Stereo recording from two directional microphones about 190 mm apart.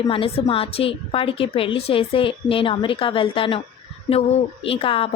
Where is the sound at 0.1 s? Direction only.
30° left (ahead or behind).